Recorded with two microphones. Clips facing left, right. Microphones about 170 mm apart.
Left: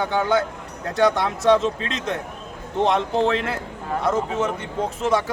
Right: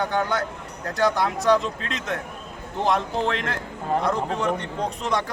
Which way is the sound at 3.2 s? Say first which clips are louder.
Left 4 dB; 5° left (ahead or behind).